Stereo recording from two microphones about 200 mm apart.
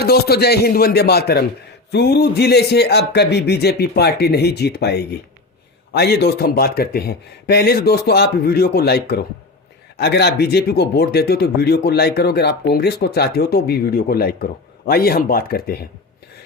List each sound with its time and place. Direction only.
0.0 s a man's voice: 50° left (ahead or behind)